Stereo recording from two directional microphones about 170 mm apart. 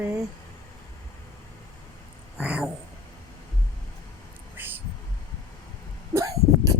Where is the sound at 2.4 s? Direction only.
10° right (ahead or behind).